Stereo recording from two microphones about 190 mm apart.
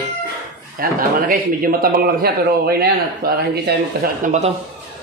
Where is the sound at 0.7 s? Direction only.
50° right (ahead or behind).